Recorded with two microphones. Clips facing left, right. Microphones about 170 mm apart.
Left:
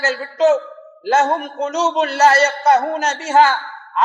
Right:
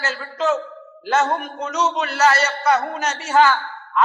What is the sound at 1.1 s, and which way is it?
A man's voice, 25° left (ahead or behind).